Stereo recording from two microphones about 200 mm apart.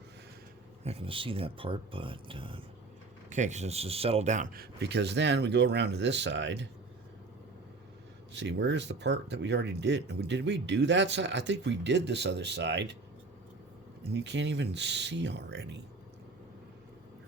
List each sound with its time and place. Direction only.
0.9 s speech: 30° right (ahead or behind)
3.2 s speech: 35° right (ahead or behind); by 6.7 s 60° right (ahead or behind)
8.3 s speech: 60° right (ahead or behind)
14.1 s speech: 60° right (ahead or behind)